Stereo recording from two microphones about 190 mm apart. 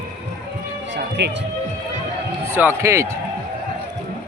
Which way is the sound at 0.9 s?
60° right (ahead or behind).